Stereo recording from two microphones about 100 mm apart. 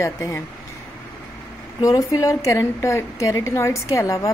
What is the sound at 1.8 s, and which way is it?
A woman's voice, 35° left (ahead or behind).